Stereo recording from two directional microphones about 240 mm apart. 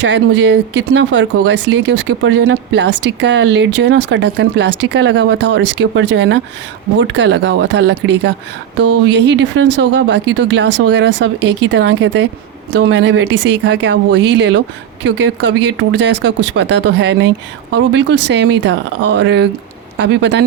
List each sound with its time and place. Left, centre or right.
0.0 s speech: right